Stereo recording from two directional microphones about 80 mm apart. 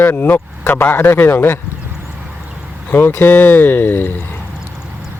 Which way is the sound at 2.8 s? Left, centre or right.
Left.